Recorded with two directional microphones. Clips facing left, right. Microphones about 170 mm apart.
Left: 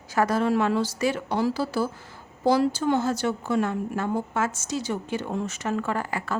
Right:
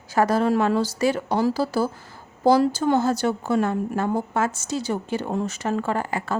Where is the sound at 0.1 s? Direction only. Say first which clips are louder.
Right 3 dB; 30° right (ahead or behind).